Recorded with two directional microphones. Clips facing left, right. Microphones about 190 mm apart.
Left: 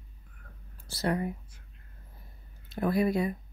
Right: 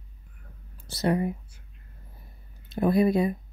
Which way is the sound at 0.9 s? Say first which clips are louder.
Right 5 dB; 20° right (ahead or behind).